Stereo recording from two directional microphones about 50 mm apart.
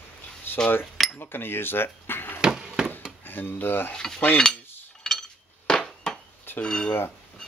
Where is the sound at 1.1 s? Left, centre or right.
Left.